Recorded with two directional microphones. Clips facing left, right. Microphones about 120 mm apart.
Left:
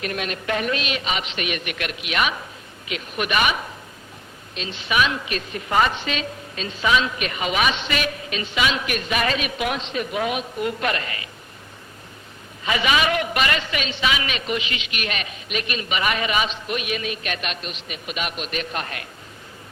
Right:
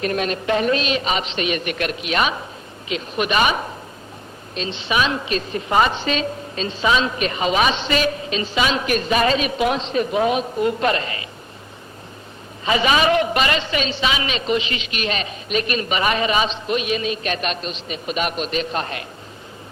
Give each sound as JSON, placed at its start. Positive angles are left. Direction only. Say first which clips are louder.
{"t": 0.0, "sound": "a woman's voice", "louder": "right 6 dB", "side_deg": -35}
{"t": 12.6, "sound": "a woman's voice", "louder": "right 4 dB", "side_deg": -35}
{"t": 18.5, "sound": "speech", "louder": "right 5 dB", "side_deg": -25}